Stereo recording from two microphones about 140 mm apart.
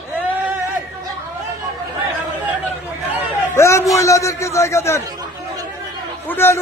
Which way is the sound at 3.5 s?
20° left (ahead or behind).